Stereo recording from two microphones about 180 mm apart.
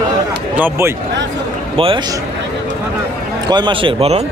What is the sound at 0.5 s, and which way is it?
Speech, 10° right (ahead or behind).